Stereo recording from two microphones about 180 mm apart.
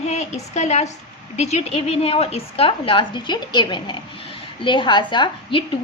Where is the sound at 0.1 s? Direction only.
40° left (ahead or behind).